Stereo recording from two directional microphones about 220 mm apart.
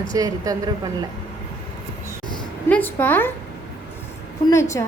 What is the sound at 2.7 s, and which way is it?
Speech, 10° left (ahead or behind).